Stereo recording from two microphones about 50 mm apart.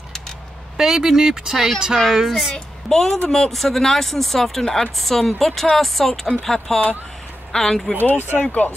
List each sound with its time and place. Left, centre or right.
0.7 s speech: centre
2.0 s a woman's voice: centre
8.0 s speech: left